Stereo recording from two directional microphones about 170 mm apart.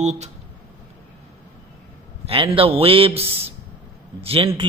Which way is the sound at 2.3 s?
35° right (ahead or behind).